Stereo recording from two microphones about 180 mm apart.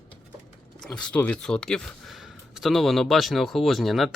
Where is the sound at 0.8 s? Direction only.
5° left (ahead or behind).